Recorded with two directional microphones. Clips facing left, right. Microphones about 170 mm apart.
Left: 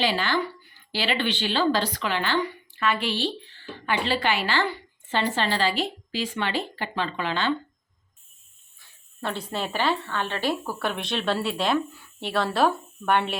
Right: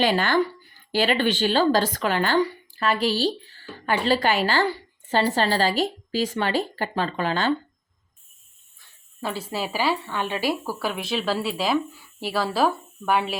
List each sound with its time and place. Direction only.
0.0 s speech: 50° right (ahead or behind)
9.2 s speech: 5° right (ahead or behind)